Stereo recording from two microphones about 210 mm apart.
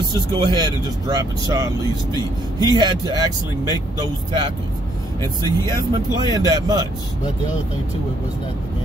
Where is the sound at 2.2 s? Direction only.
20° left (ahead or behind).